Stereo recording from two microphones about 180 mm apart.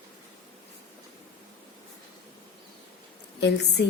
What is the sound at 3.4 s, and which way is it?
Speech, 70° left (ahead or behind).